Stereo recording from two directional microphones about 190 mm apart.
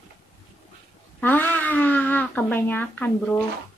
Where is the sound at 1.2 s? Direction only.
10° left (ahead or behind).